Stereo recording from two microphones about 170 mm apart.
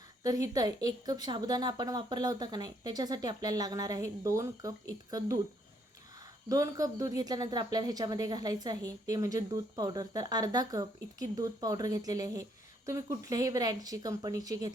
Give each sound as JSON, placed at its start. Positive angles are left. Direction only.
{"t": 0.2, "sound": "a woman's voice", "side_deg": -20}
{"t": 6.5, "sound": "a woman's voice", "side_deg": -20}